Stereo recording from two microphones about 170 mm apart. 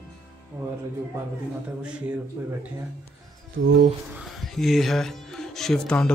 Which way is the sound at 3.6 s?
90° right.